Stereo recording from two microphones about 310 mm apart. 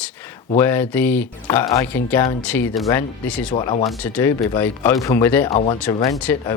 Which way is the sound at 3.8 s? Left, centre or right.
Centre.